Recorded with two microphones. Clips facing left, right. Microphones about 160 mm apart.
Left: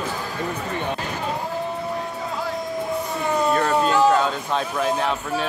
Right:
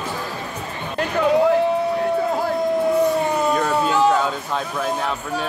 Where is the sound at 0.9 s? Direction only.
75° right (ahead or behind).